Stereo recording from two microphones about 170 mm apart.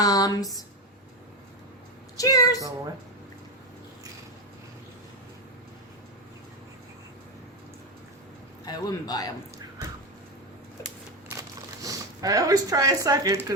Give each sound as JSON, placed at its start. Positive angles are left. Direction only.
{"t": 0.0, "sound": "speech", "side_deg": 20}
{"t": 2.1, "sound": "speech", "side_deg": 20}
{"t": 8.6, "sound": "a man's voice", "side_deg": 25}
{"t": 11.3, "sound": "crumpling", "side_deg": -20}